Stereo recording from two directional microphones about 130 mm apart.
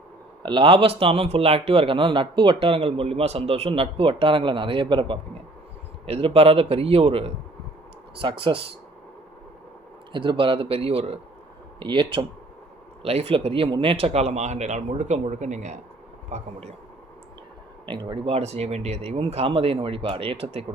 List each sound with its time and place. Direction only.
0.4 s a man's voice: 40° right (ahead or behind)
10.1 s a man's voice: 40° right (ahead or behind)
11.8 s speech: 40° right (ahead or behind)
13.0 s speech: 50° right (ahead or behind)
17.8 s a man's voice: 40° right (ahead or behind)